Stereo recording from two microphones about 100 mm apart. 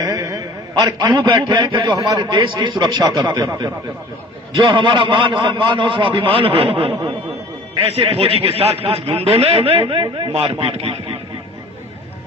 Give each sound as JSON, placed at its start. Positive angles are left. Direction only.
{"t": 0.0, "sound": "a sound", "side_deg": -35}
{"t": 0.7, "sound": "a man's voice", "side_deg": -50}
{"t": 1.8, "sound": "a man's voice", "side_deg": -35}
{"t": 4.5, "sound": "a man's voice", "side_deg": -55}